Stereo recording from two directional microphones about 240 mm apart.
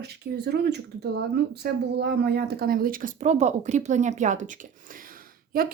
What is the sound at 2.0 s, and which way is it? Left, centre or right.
A woman's voice, right.